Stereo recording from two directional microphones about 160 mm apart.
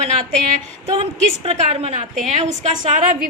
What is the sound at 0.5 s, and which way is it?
A woman's voice, 40° right (ahead or behind).